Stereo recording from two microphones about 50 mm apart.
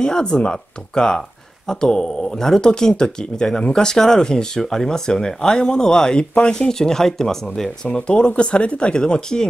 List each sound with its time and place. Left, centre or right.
0.0 s speech: centre